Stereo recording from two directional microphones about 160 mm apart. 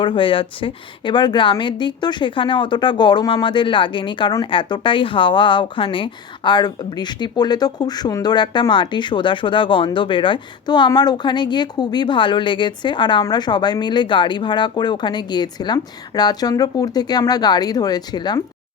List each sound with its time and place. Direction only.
0.0 s a woman's voice: 30° left (ahead or behind)